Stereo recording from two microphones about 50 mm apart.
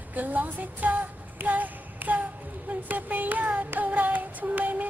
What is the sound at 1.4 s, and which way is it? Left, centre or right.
Child singing, right.